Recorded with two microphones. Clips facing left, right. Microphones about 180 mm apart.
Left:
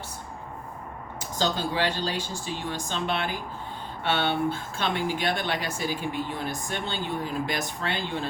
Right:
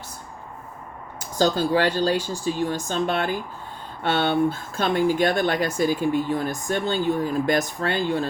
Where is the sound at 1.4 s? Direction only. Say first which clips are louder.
Right 7 dB; 45° right (ahead or behind).